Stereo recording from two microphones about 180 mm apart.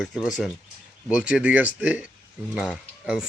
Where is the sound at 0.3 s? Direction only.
Centre (ahead or behind).